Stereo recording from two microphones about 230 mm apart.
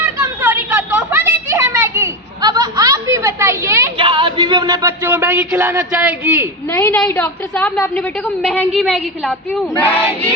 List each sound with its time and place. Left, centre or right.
0.0 s a sound: centre
3.9 s music: right; by 6.5 s centre
6.7 s a woman's voice: centre
8.4 s a woman's voice: centre